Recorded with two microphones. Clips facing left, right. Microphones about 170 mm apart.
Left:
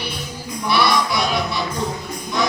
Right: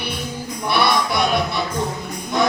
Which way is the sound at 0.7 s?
55° right (ahead or behind).